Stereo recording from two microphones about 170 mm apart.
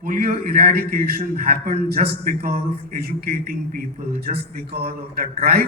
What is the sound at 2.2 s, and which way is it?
A man's voice, 65° right (ahead or behind).